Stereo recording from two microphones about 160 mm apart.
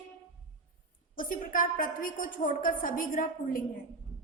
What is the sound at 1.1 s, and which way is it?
A woman's voice, 55° left (ahead or behind).